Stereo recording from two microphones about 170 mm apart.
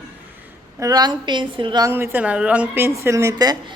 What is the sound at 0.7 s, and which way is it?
A woman's voice, 20° right (ahead or behind).